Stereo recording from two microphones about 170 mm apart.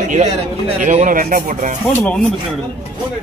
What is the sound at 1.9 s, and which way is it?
Speech, 10° left (ahead or behind).